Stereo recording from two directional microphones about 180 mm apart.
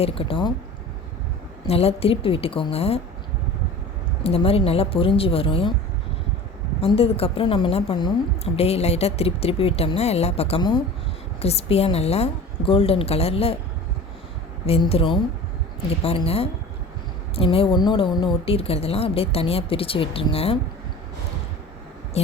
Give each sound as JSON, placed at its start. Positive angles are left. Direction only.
{"t": 0.0, "sound": "speech", "side_deg": 30}
{"t": 1.6, "sound": "speech", "side_deg": 35}
{"t": 4.2, "sound": "speech", "side_deg": 35}
{"t": 6.8, "sound": "speech", "side_deg": 35}
{"t": 14.7, "sound": "speech", "side_deg": 35}